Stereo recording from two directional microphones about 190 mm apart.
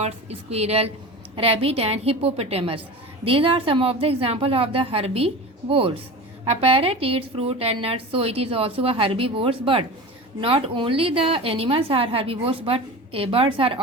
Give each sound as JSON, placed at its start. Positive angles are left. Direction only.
{"t": 0.0, "sound": "a woman's voice", "side_deg": -35}